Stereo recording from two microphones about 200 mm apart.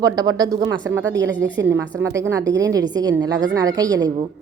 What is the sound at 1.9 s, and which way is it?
A woman's voice, 15° right (ahead or behind).